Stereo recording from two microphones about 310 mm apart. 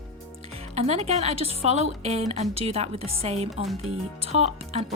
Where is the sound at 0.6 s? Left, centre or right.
Centre.